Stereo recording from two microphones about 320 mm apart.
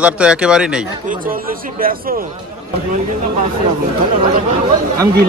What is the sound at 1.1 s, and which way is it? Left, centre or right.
Speech, right.